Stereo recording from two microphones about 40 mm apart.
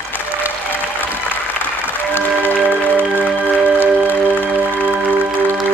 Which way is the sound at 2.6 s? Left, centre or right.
Right.